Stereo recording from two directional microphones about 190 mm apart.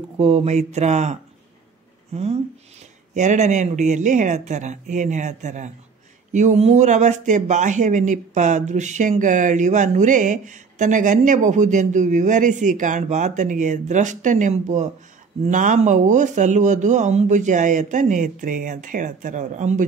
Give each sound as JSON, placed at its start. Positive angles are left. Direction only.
{"t": 0.2, "sound": "speech", "side_deg": -30}
{"t": 2.1, "sound": "speech", "side_deg": -35}